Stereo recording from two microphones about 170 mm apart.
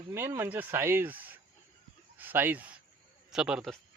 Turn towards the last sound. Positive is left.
turn(degrees=-5)  # may be behind; listen again after turning